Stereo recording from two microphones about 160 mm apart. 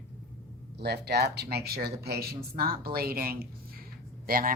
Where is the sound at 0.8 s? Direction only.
90° right.